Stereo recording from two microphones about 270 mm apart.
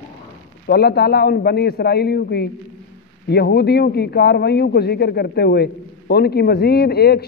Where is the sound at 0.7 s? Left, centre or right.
Left.